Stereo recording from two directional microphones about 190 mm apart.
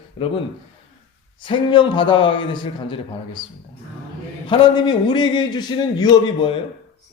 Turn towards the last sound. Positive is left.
turn(degrees=25)  # may be behind; listen again after turning